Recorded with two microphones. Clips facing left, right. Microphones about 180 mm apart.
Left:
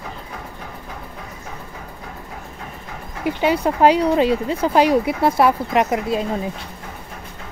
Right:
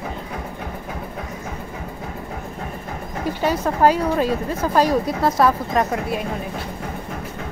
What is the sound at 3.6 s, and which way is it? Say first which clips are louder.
Speech: left 2 dB; 20° left (ahead or behind).